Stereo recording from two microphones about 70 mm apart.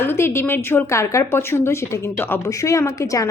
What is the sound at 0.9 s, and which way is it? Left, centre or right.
A woman's voice, left.